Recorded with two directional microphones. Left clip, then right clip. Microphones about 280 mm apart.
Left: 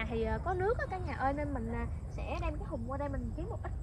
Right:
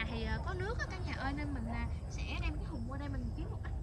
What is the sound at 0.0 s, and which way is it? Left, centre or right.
Speech, centre.